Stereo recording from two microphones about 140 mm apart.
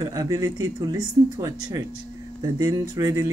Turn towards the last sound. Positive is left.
turn(degrees=-25)  # may be behind; listen again after turning